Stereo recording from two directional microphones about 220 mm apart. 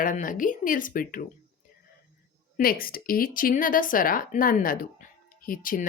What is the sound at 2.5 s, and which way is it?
A woman's voice, 40° left (ahead or behind).